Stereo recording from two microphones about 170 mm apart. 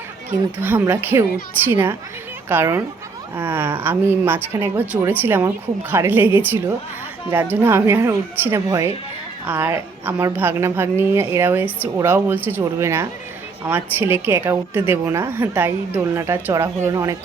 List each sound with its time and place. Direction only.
0.3 s a woman's voice: 10° right (ahead or behind)